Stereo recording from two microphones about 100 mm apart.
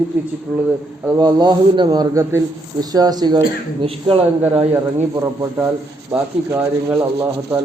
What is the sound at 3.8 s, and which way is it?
Speech, 65° right (ahead or behind).